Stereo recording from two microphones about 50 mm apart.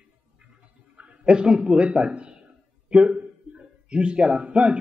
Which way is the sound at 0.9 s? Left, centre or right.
Right.